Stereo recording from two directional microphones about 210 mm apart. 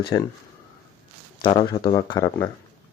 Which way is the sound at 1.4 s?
20° left (ahead or behind).